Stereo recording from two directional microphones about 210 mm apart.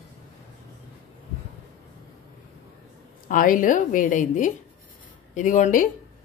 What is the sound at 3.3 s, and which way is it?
A woman's voice, 40° left (ahead or behind).